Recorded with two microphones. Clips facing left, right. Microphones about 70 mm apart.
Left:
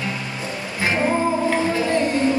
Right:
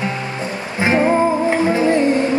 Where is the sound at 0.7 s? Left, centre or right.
Right.